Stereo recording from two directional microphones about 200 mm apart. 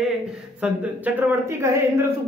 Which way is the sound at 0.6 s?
5° right (ahead or behind).